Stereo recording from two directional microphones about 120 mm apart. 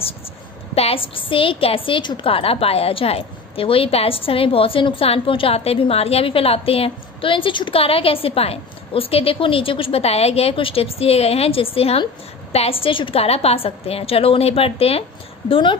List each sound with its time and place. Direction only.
0.7 s a woman's voice: 50° left (ahead or behind)